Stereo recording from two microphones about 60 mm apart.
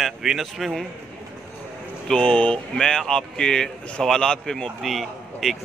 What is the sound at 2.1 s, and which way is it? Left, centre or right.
Speech, centre.